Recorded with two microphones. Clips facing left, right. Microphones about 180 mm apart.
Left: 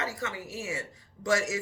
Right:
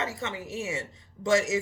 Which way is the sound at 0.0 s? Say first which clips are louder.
Right 2 dB; 25° right (ahead or behind).